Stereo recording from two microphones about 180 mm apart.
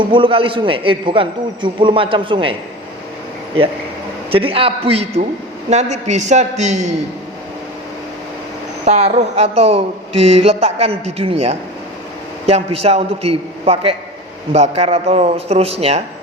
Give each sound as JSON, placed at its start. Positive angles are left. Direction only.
{"t": 0.0, "sound": "a man's voice", "side_deg": -30}
{"t": 4.3, "sound": "speech", "side_deg": -30}
{"t": 8.8, "sound": "speech", "side_deg": -35}